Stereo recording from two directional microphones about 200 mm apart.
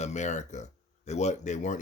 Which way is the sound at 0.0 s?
35° left (ahead or behind).